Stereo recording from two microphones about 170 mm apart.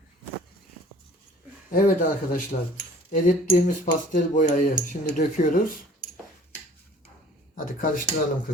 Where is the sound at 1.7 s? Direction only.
55° left (ahead or behind).